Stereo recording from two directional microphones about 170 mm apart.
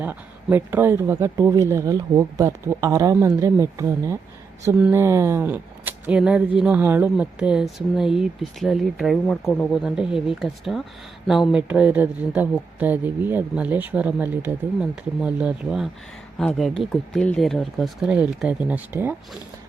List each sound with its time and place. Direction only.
0.0 s speech: 10° right (ahead or behind); by 9.6 s 10° left (ahead or behind)
9.7 s speech: 5° right (ahead or behind)